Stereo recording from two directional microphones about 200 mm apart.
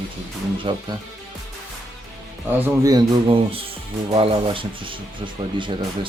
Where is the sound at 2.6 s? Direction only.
15° right (ahead or behind).